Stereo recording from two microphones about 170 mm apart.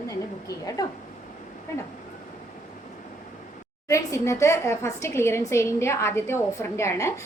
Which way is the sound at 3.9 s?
15° left (ahead or behind).